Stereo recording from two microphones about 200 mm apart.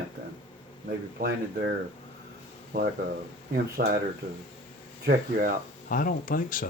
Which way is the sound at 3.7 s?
50° right (ahead or behind).